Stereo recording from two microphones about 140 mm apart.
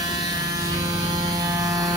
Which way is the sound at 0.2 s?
25° right (ahead or behind).